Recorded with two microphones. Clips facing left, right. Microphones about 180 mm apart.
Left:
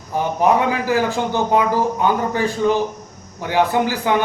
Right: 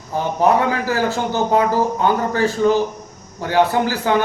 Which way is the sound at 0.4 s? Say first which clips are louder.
Right 1 dB; 15° left (ahead or behind).